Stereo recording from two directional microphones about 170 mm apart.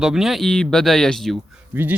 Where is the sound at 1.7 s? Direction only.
10° right (ahead or behind).